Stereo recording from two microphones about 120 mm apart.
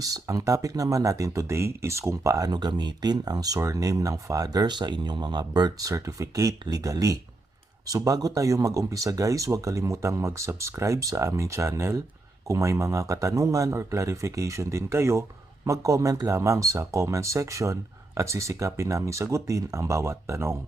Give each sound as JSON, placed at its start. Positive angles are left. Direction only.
{"t": 0.0, "sound": "speech", "side_deg": -30}